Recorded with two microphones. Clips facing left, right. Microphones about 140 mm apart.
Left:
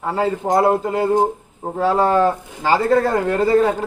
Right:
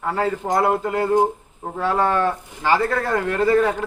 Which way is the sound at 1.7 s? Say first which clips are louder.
Left 4 dB; 35° left (ahead or behind).